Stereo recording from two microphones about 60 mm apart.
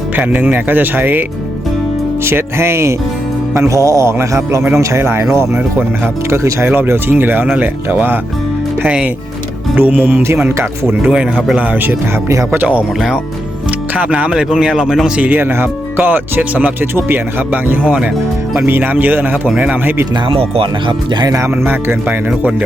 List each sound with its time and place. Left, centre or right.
0.2 s speech: right
2.2 s speech: right
3.5 s music: right
4.6 s speech: right
6.7 s speech: right
8.8 s a man's voice: centre
9.7 s speech: right
11.0 s a man's voice: centre
14.1 s a man's voice: centre
15.2 s speech: right
21.6 s speech: right
22.0 s speech: right